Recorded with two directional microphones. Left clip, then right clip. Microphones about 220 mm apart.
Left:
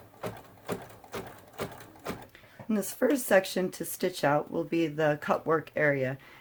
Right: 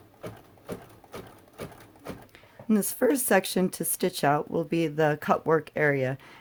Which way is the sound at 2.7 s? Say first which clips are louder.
Right 3 dB; 45° right (ahead or behind).